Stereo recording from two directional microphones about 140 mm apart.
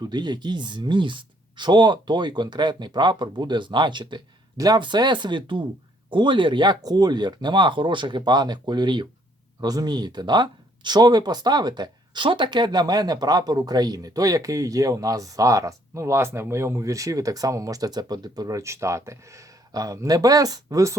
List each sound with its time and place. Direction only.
0.0 s speech: 30° right (ahead or behind)